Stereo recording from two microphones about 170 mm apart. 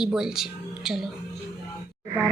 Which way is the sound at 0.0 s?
5° right (ahead or behind).